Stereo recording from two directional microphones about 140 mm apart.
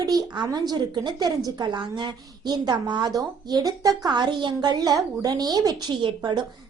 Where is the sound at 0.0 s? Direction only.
30° right (ahead or behind).